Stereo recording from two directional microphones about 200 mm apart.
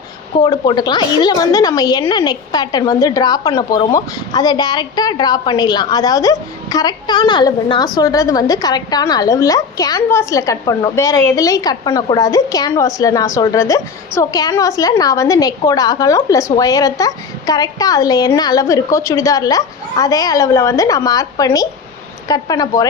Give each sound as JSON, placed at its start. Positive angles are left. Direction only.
{"t": 0.4, "sound": "a woman's voice", "side_deg": 20}